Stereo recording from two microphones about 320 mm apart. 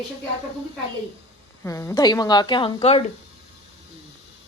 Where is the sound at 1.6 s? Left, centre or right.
Centre.